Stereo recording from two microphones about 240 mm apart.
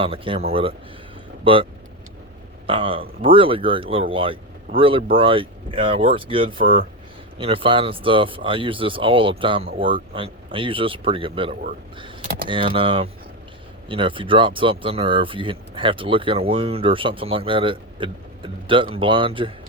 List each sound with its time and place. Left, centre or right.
0.0 s speech: right
2.6 s speech: right